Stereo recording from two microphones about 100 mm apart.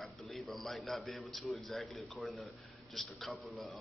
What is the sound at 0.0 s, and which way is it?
A man's voice, centre (ahead or behind).